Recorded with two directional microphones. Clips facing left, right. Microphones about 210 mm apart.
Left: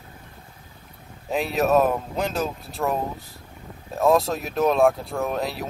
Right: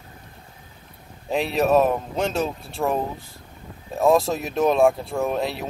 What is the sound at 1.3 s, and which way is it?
Speech, centre (ahead or behind).